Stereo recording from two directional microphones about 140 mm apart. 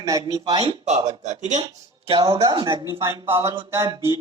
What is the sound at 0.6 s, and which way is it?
Speech, 45° right (ahead or behind).